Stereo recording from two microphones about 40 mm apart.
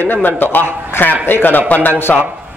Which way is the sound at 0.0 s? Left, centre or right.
Left.